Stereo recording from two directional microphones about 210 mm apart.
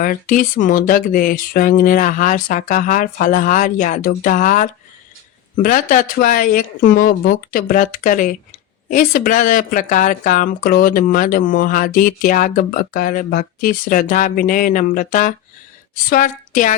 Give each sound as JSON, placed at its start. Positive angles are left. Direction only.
{"t": 0.0, "sound": "speech", "side_deg": 40}